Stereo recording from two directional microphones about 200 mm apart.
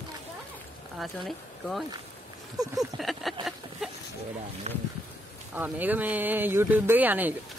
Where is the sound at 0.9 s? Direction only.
Centre (ahead or behind).